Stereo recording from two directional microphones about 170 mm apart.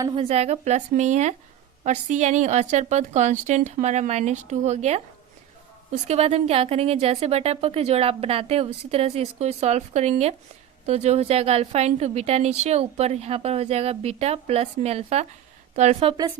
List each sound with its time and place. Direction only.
0.1 s a woman's voice: 35° right (ahead or behind)
6.1 s a woman's voice: 35° right (ahead or behind)